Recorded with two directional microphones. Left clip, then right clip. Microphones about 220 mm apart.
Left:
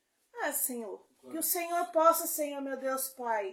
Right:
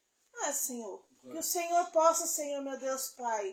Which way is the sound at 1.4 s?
20° left (ahead or behind).